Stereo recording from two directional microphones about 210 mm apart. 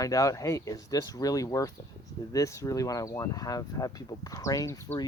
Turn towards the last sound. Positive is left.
turn(degrees=15)  # may be behind; listen again after turning